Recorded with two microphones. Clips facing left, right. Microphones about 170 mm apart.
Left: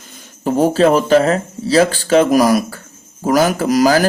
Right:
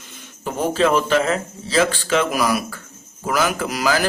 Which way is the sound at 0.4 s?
40° left (ahead or behind).